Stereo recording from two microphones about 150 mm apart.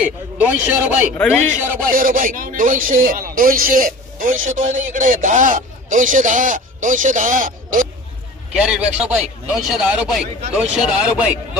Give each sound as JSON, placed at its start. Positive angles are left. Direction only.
{"t": 0.0, "sound": "a man's voice", "side_deg": -10}
{"t": 1.1, "sound": "a man's voice", "side_deg": 10}
{"t": 1.9, "sound": "speech", "side_deg": -65}
{"t": 8.5, "sound": "a man's voice", "side_deg": -5}